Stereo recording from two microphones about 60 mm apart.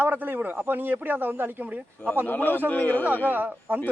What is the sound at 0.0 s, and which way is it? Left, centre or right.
A man's voice, right.